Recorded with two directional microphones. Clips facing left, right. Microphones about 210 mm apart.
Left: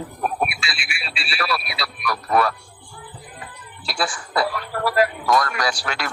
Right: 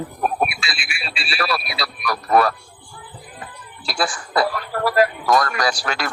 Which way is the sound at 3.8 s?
40° right (ahead or behind).